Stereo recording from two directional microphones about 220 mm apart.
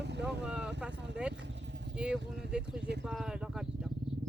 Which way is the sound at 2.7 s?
50° right (ahead or behind).